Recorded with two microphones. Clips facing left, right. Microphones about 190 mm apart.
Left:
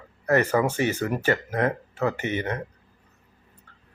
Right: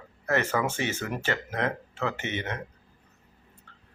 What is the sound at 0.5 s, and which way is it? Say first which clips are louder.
Speech: left 6 dB; 40° left (ahead or behind).